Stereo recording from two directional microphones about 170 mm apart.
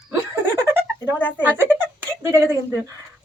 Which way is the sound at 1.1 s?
10° left (ahead or behind).